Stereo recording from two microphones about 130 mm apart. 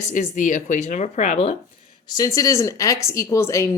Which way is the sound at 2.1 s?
30° left (ahead or behind).